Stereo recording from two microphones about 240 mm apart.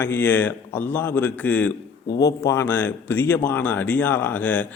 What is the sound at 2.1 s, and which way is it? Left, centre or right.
Speech, left.